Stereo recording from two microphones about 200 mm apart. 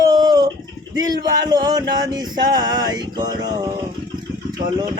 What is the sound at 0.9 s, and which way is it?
Music, 20° right (ahead or behind).